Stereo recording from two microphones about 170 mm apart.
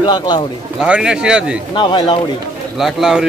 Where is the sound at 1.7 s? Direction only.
25° left (ahead or behind).